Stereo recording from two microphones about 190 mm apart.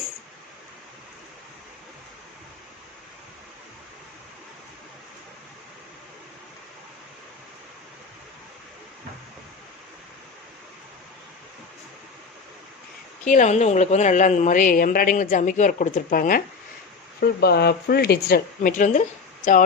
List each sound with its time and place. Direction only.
13.2 s a woman's voice: 40° left (ahead or behind)
17.2 s a woman's voice: 60° left (ahead or behind)